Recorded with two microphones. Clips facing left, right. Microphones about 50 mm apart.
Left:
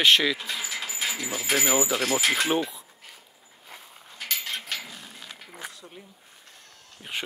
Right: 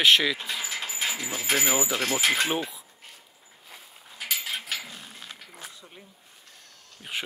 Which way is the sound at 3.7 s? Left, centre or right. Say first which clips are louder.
Left 2 dB; centre.